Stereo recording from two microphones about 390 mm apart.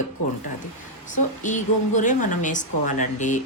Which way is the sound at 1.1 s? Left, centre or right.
Centre.